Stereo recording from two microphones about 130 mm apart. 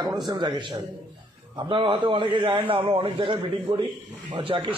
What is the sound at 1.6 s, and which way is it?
A man's voice, 40° right (ahead or behind).